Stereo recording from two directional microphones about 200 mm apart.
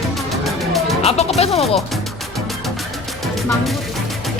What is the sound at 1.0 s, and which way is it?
Speech, 30° left (ahead or behind).